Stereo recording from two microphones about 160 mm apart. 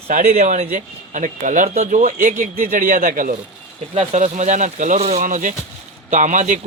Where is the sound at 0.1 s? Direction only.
50° right (ahead or behind).